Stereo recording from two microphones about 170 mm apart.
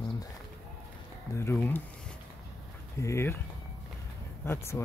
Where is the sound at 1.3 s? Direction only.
15° left (ahead or behind).